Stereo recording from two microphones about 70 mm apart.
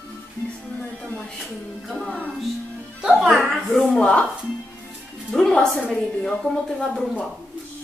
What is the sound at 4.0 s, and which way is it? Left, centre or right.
Speech, centre.